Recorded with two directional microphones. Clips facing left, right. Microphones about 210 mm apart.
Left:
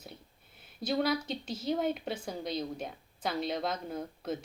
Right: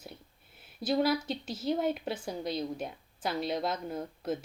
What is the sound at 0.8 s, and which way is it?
A woman's voice, 5° right (ahead or behind).